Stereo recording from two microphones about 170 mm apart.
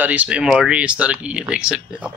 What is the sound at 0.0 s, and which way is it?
Speech, 10° right (ahead or behind).